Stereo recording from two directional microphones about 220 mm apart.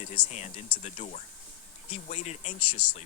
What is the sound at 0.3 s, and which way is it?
Speech, 30° left (ahead or behind).